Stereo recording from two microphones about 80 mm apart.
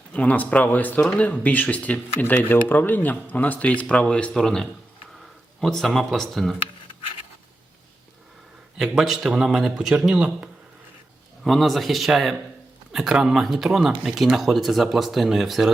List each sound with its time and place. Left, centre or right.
0.1 s speech: centre
8.8 s speech: centre
11.4 s speech: centre